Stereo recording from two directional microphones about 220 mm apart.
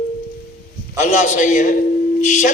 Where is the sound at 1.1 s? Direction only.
35° left (ahead or behind).